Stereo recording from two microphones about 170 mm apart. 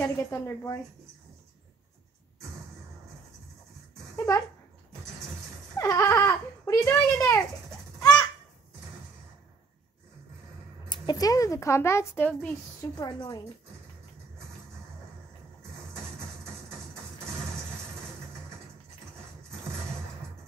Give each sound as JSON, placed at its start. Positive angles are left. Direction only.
{"t": 0.0, "sound": "speech", "side_deg": 15}
{"t": 4.3, "sound": "a woman's voice", "side_deg": 20}
{"t": 5.8, "sound": "goat", "side_deg": 20}
{"t": 10.9, "sound": "speech", "side_deg": 25}
{"t": 12.9, "sound": "a woman's voice", "side_deg": 20}